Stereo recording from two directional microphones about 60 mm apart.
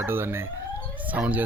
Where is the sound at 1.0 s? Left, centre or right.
Right.